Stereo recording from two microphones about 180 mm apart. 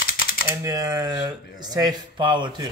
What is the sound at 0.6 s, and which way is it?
Speech, 20° right (ahead or behind).